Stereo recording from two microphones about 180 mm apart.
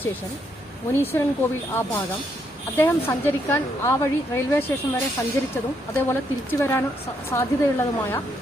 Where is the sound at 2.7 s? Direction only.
10° left (ahead or behind).